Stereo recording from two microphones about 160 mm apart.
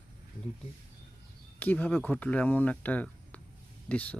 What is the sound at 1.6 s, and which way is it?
Speech, 10° left (ahead or behind).